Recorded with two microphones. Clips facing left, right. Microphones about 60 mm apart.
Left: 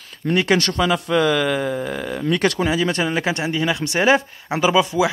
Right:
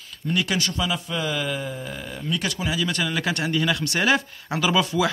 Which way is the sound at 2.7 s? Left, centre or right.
Left.